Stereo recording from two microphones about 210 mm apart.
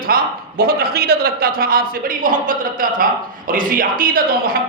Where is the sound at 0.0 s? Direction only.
45° right (ahead or behind).